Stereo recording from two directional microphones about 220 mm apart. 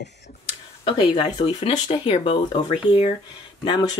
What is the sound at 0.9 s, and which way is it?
Speech, 20° left (ahead or behind).